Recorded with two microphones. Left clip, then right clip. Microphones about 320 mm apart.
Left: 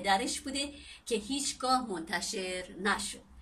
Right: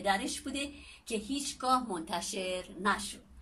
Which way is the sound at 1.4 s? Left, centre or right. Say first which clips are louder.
Right 2 dB; centre.